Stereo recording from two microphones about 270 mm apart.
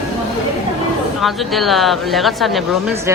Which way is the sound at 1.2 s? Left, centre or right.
Centre.